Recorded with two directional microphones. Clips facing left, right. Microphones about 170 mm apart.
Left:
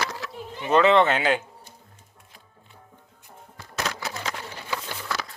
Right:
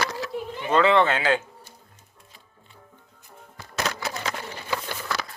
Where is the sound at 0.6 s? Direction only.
20° left (ahead or behind).